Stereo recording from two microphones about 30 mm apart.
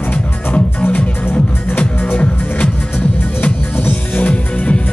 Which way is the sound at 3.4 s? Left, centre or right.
Left.